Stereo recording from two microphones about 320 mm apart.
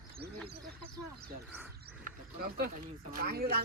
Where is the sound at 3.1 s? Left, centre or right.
Right.